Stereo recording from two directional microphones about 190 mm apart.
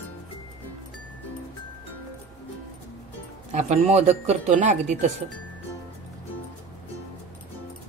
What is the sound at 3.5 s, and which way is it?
Speech, 40° right (ahead or behind).